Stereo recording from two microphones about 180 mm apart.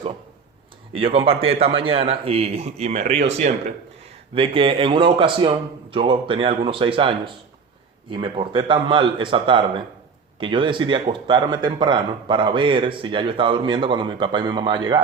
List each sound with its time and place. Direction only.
0.9 s a man's voice: 30° right (ahead or behind)